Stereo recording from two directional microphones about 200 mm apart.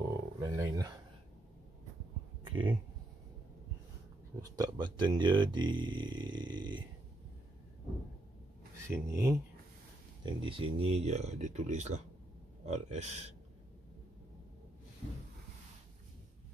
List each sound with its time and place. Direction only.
0.4 s speech: 15° right (ahead or behind)
2.4 s a sound: 25° right (ahead or behind)
4.4 s speech: 20° right (ahead or behind)
8.8 s speech: 15° right (ahead or behind)
10.2 s speech: 25° right (ahead or behind)